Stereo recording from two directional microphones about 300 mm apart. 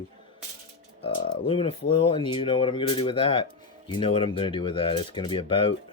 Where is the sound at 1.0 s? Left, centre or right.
Centre.